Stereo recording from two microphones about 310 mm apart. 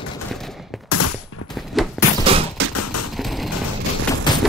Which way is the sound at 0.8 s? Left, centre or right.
Left.